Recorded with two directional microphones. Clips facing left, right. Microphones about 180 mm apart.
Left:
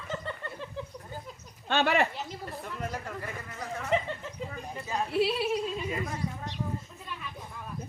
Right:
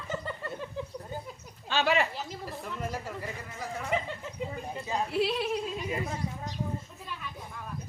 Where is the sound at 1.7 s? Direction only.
55° left (ahead or behind).